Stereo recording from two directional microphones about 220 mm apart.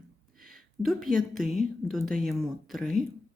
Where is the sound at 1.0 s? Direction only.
40° right (ahead or behind).